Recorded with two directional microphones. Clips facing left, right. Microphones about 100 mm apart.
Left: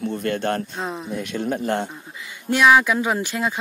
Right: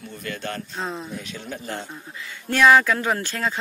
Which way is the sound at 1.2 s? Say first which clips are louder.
Left 9 dB; 55° left (ahead or behind).